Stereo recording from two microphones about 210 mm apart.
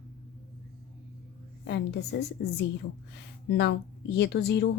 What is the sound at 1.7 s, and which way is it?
A woman's voice, 55° left (ahead or behind).